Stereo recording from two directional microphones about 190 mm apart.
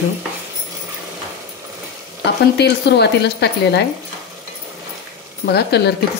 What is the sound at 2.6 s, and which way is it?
Speech, 60° left (ahead or behind).